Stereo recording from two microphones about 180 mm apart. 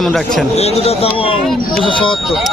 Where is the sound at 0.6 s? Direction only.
35° left (ahead or behind).